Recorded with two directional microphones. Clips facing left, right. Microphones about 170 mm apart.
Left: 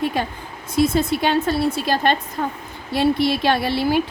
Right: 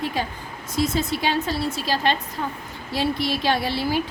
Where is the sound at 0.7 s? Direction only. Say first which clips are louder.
Left 5 dB; 60° left (ahead or behind).